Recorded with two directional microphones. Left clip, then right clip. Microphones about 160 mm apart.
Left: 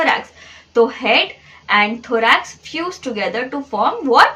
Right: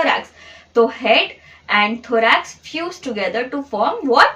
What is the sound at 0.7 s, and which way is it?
A woman's voice, 20° left (ahead or behind).